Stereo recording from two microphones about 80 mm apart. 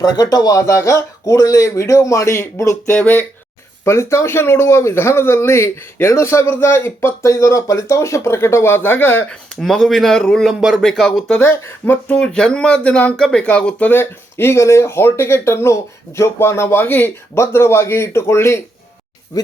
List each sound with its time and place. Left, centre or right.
0.0 s speech: left
2.9 s speech: left
3.8 s speech: left
9.3 s speech: centre
10.6 s speech: centre
10.8 s speech: centre
11.3 s speech: left
12.2 s speech: centre
13.9 s speech: left
19.3 s speech: left